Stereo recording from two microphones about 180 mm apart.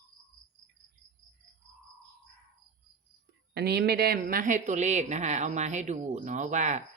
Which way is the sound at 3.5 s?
65° right (ahead or behind).